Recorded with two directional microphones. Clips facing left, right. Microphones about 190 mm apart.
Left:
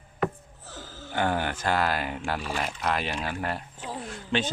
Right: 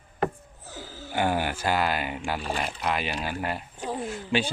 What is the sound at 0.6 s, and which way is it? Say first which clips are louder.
Speech: right 2 dB; 10° right (ahead or behind).